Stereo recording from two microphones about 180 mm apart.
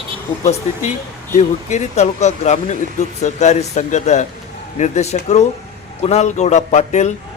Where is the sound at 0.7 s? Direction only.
40° left (ahead or behind).